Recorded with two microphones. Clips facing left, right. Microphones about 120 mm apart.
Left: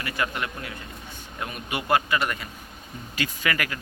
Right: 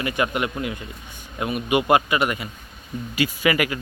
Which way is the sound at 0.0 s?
20° right (ahead or behind).